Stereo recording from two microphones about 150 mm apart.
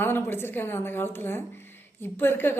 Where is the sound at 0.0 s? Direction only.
15° left (ahead or behind).